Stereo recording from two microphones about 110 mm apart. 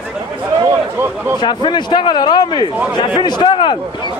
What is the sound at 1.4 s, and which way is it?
Speech, 45° left (ahead or behind).